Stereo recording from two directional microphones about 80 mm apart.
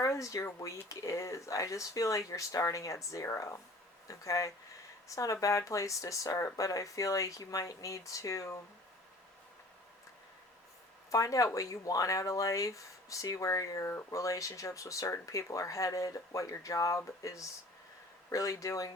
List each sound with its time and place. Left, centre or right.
0.0 s speech: left
11.1 s speech: left